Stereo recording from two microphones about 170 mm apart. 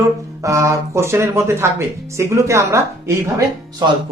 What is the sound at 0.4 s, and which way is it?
Speech, 20° right (ahead or behind).